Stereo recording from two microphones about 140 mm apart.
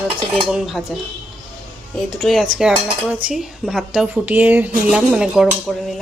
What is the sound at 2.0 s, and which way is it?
Speech, centre (ahead or behind).